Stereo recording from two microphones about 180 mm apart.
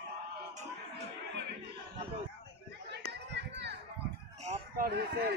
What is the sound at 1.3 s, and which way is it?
Chatter, 70° right (ahead or behind).